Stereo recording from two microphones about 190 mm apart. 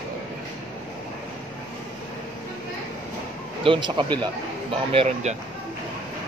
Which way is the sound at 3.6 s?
25° right (ahead or behind).